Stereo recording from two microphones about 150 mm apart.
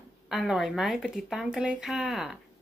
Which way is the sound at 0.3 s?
5° right (ahead or behind).